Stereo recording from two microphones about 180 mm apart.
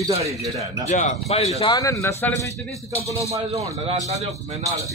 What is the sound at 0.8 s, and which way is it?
Speech, 40° left (ahead or behind).